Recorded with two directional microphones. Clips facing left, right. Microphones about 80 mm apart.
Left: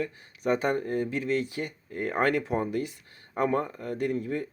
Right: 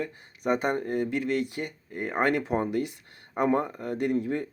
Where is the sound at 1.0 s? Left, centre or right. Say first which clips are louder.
Right 1 dB; right.